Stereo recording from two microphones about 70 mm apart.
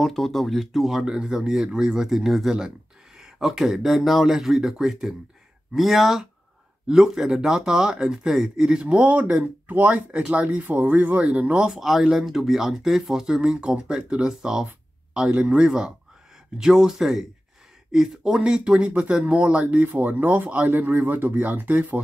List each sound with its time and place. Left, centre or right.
0.0 s speech: centre; by 22.0 s right